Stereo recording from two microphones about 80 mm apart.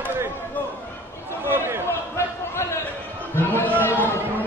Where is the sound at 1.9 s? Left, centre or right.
Left.